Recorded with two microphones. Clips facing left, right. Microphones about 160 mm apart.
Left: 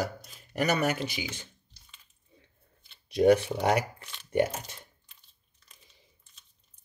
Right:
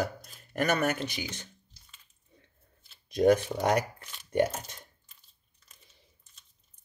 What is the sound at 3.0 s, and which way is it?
Speech, 10° left (ahead or behind).